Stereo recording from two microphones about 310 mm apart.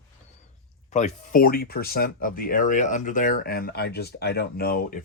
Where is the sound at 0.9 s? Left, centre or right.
Left.